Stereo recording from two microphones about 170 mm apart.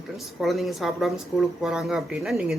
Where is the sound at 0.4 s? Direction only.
Centre (ahead or behind).